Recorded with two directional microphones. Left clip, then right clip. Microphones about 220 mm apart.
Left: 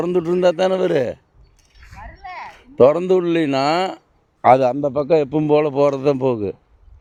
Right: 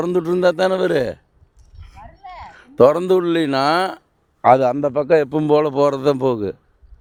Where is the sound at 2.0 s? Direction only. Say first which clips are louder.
Left 3 dB; 5° right (ahead or behind).